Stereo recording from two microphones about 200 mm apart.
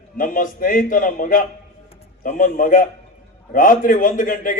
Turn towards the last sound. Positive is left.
turn(degrees=40)  # may be behind; listen again after turning